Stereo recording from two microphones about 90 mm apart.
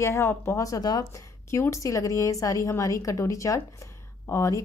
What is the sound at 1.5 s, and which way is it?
A woman's voice, 35° left (ahead or behind).